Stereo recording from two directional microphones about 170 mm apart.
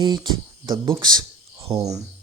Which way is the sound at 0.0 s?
25° right (ahead or behind).